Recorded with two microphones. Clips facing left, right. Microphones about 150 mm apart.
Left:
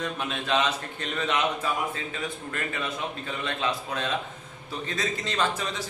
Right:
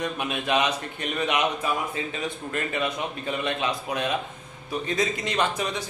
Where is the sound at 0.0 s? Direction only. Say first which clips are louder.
Right 3 dB; 15° right (ahead or behind).